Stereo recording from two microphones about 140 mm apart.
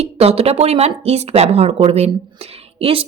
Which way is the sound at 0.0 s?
45° right (ahead or behind).